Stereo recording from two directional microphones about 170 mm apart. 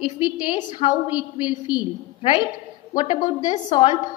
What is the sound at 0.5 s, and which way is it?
A woman's voice, 30° left (ahead or behind).